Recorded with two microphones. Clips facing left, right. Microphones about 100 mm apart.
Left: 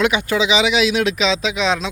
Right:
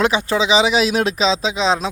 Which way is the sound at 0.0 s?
30° right (ahead or behind).